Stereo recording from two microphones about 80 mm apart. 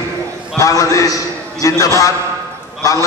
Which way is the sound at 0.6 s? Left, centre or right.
Left.